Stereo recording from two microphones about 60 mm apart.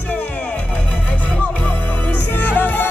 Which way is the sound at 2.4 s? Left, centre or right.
Left.